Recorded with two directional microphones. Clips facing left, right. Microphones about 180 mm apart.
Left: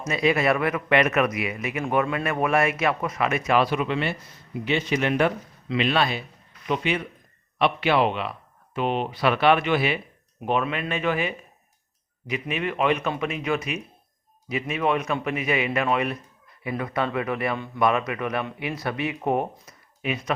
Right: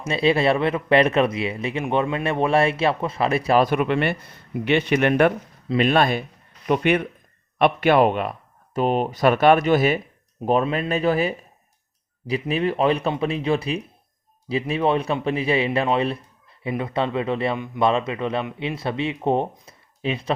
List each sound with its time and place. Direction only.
0.1 s speech: 30° right (ahead or behind)
3.7 s a man's voice: 55° right (ahead or behind)
5.6 s a man's voice: 45° right (ahead or behind); by 20.3 s 30° right (ahead or behind)